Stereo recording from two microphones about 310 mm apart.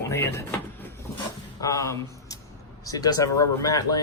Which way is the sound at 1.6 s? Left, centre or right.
Centre.